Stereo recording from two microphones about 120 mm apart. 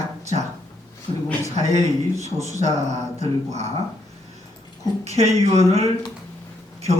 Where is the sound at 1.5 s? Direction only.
70° right (ahead or behind).